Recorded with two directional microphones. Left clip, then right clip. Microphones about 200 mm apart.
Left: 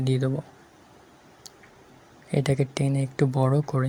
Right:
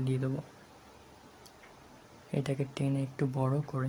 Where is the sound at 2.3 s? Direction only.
25° left (ahead or behind).